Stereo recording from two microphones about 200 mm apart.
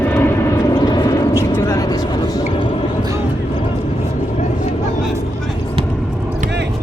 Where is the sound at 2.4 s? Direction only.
25° left (ahead or behind).